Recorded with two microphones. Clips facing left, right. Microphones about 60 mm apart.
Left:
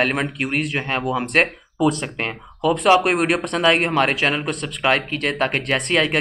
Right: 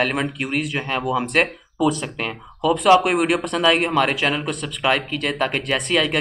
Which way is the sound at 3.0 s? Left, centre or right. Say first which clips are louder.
Even; left.